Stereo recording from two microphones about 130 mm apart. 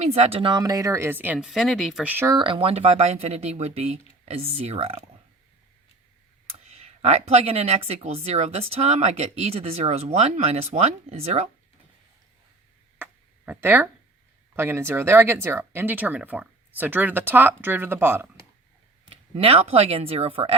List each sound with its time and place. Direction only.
0.0 s speech: 55° right (ahead or behind)
0.6 s speech: 25° right (ahead or behind)
1.5 s speech: centre (ahead or behind)
2.0 s speech: 15° right (ahead or behind)
2.3 s speech: 40° right (ahead or behind)
6.5 s speech: 55° right (ahead or behind)
13.0 s a sound: 10° right (ahead or behind)
14.5 s speech: 20° right (ahead or behind)
19.0 s speech: 45° right (ahead or behind)